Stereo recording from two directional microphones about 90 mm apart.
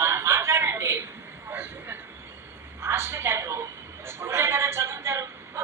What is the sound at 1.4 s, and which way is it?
Vehicle, 25° right (ahead or behind).